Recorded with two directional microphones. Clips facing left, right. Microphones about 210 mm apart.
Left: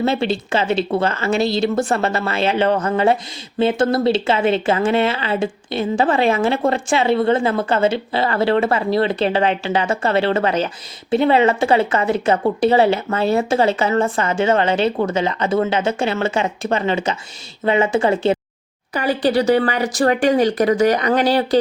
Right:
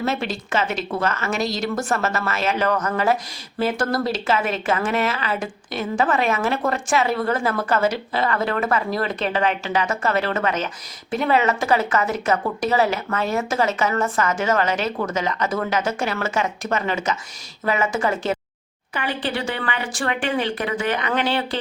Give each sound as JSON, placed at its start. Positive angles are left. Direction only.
{"t": 0.0, "sound": "a woman's voice", "side_deg": 30}
{"t": 18.9, "sound": "speech", "side_deg": 40}